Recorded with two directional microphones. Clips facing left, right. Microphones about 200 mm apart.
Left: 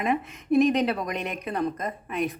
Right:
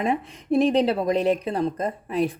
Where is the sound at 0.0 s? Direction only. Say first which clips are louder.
Right 2 dB; 30° right (ahead or behind).